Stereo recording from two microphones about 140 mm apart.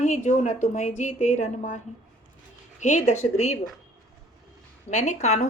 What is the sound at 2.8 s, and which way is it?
Speech, 60° left (ahead or behind).